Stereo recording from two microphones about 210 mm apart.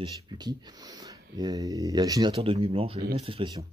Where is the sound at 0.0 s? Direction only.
20° right (ahead or behind).